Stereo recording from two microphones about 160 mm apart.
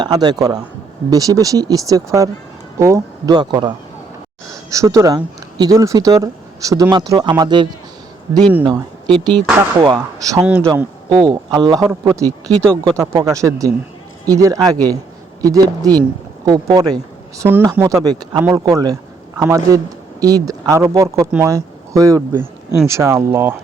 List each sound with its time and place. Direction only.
0.0 s speech: 25° right (ahead or behind)
10.4 s speech: 10° right (ahead or behind)
17.4 s speech: 15° right (ahead or behind)